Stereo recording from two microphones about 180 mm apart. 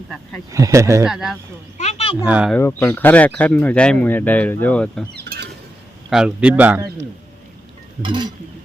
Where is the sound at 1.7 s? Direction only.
35° left (ahead or behind).